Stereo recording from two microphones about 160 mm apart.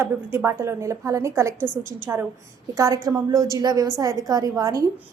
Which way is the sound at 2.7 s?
20° right (ahead or behind).